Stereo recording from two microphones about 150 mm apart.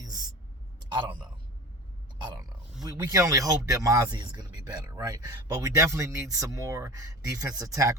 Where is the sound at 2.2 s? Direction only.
25° right (ahead or behind).